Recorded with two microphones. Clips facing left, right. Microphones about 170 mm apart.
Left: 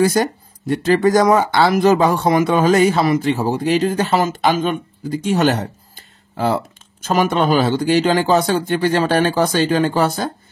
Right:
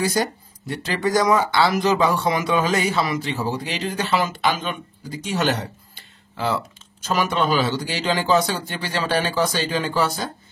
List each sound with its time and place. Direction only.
0.0 s speech: 55° left (ahead or behind)